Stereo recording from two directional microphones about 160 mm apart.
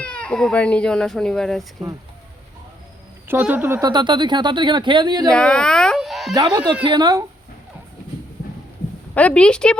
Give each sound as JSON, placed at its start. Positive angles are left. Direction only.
{"t": 0.0, "sound": "speech", "side_deg": 5}
{"t": 3.2, "sound": "speech", "side_deg": -10}
{"t": 3.8, "sound": "speech", "side_deg": -25}
{"t": 5.3, "sound": "speech", "side_deg": 5}
{"t": 6.3, "sound": "speech", "side_deg": -25}
{"t": 9.1, "sound": "speech", "side_deg": 10}